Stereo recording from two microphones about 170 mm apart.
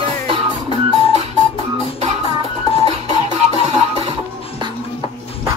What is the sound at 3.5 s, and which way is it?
Music, 35° right (ahead or behind).